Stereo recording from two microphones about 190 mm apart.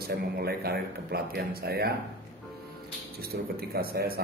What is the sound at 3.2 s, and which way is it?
Speech, 55° right (ahead or behind).